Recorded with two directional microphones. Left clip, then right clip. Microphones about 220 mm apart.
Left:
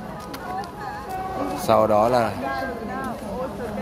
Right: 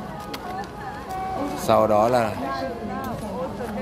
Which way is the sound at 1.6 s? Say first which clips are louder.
Even; 5° left (ahead or behind).